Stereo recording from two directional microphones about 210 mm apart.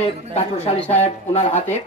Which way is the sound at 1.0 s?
30° left (ahead or behind).